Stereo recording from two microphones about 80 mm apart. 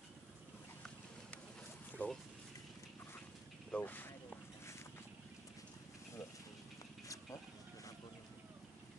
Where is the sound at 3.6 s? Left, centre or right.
Left.